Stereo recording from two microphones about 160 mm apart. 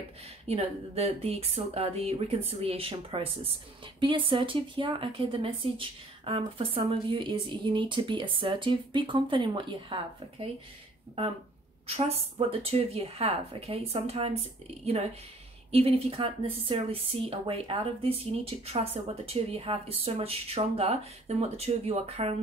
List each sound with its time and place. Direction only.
0.5 s speech: 40° right (ahead or behind)
12.1 s speech: 40° right (ahead or behind)
15.7 s speech: 35° right (ahead or behind)